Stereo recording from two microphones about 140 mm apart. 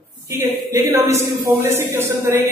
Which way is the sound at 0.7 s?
20° right (ahead or behind).